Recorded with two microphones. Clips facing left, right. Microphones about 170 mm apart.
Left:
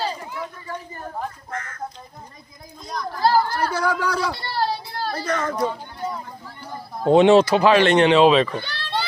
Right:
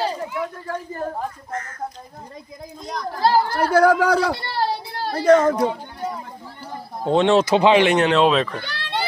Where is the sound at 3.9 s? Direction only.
60° right (ahead or behind).